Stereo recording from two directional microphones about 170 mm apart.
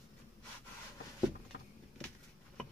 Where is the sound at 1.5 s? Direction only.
60° left (ahead or behind).